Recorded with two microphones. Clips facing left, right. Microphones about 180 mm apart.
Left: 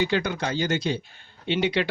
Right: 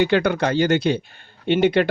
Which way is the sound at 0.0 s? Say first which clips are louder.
Right 7 dB; 60° right (ahead or behind).